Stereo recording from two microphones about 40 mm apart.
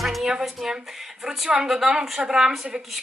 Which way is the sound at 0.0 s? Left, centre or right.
Centre.